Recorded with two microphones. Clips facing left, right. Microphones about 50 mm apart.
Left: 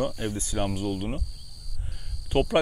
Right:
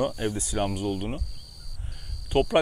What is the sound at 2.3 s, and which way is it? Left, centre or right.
Speech, centre.